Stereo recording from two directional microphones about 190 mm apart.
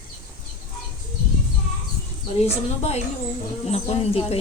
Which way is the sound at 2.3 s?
35° left (ahead or behind).